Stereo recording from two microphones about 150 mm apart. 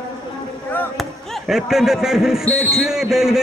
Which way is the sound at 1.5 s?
5° right (ahead or behind).